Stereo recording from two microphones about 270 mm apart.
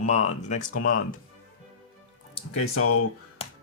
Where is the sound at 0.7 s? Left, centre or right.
Left.